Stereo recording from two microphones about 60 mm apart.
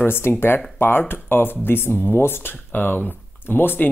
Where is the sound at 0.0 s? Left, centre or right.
Left.